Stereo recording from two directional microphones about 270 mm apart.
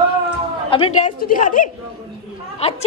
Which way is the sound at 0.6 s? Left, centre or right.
Centre.